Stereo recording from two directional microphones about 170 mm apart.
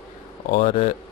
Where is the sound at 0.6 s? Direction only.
35° left (ahead or behind).